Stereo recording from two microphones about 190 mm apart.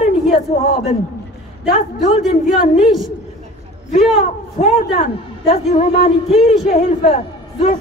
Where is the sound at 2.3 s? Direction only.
40° left (ahead or behind).